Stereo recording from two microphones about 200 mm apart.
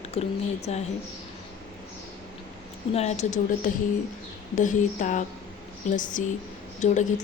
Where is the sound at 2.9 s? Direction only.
35° left (ahead or behind).